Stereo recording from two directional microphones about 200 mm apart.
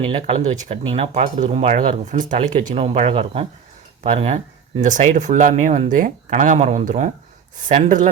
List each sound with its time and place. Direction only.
0.0 s speech: 30° right (ahead or behind)